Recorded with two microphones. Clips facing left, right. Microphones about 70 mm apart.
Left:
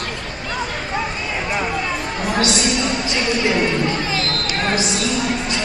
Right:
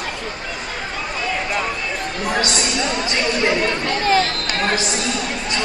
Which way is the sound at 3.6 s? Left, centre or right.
Right.